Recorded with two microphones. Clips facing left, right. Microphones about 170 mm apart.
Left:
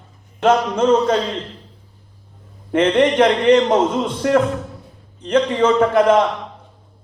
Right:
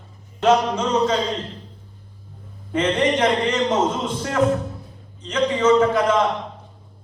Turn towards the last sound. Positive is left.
turn(degrees=55)  # may be behind; listen again after turning